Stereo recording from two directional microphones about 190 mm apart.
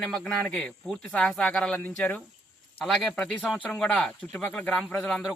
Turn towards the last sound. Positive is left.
turn(degrees=0)  # may be behind; listen again after turning